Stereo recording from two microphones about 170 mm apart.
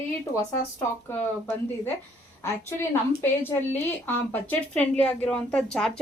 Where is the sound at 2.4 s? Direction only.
15° left (ahead or behind).